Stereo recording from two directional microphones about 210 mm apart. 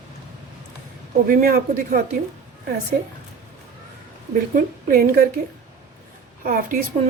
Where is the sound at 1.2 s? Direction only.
45° right (ahead or behind).